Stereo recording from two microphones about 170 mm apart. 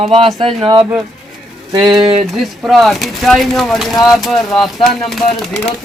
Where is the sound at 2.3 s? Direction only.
Centre (ahead or behind).